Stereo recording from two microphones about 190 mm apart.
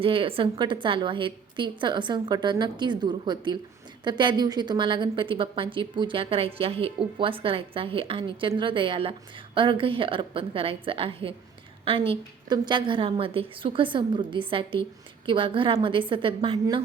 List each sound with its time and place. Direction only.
0.0 s a woman's voice: 30° right (ahead or behind)